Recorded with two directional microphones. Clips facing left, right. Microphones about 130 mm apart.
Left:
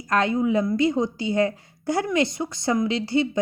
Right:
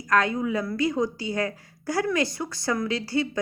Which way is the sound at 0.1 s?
25° left (ahead or behind).